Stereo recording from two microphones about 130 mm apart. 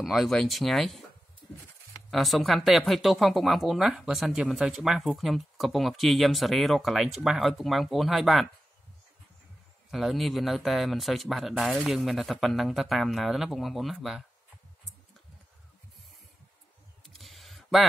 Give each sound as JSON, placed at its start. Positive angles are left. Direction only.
{"t": 0.0, "sound": "speech", "side_deg": 0}
{"t": 2.0, "sound": "speech", "side_deg": 0}
{"t": 9.8, "sound": "speech", "side_deg": 0}
{"t": 17.2, "sound": "a sound", "side_deg": 0}